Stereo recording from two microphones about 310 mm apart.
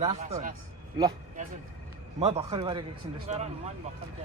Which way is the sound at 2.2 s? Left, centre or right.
Centre.